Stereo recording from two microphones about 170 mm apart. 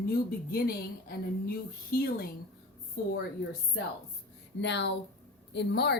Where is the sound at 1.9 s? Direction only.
65° left (ahead or behind).